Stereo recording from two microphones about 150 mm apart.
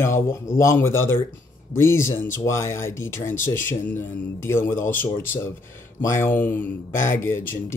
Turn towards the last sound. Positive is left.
turn(degrees=15)  # may be behind; listen again after turning